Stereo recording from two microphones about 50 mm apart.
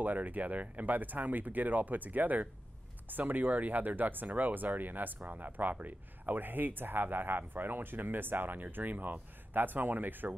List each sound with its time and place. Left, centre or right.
0.0 s speech: right